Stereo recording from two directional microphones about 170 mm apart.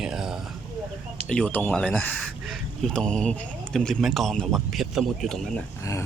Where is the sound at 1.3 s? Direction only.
10° left (ahead or behind).